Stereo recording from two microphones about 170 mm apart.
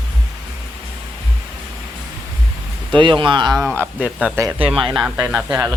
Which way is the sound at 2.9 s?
30° right (ahead or behind).